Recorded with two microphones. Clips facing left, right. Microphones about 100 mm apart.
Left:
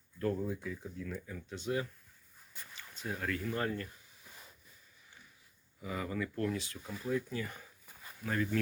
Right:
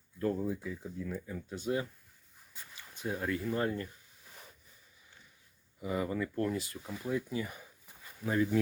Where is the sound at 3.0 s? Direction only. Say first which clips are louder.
Right 3 dB; 20° right (ahead or behind).